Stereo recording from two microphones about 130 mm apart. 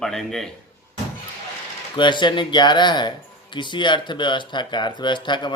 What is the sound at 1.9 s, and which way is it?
Speech, 35° left (ahead or behind).